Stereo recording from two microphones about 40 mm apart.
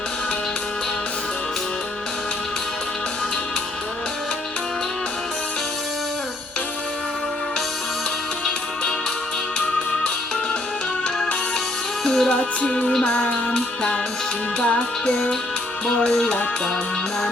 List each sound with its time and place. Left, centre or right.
12.0 s music: centre
12.3 s music: left
13.5 s music: centre
14.6 s music: left
16.0 s music: centre